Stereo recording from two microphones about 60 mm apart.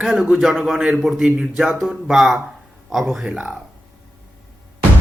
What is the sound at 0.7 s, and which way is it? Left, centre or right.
A man's voice, centre.